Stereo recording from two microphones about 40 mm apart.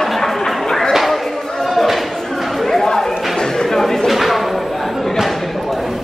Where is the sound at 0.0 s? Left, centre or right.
Centre.